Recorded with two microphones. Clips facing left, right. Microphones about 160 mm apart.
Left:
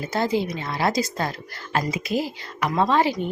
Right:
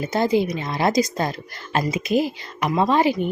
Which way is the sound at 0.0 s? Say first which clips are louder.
Right 4 dB; 15° right (ahead or behind).